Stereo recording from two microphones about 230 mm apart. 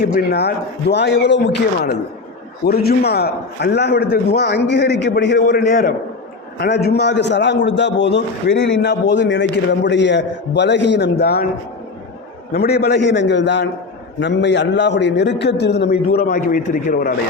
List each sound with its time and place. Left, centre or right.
0.0 s a man's voice: left
2.6 s a man's voice: left
12.5 s a man's voice: left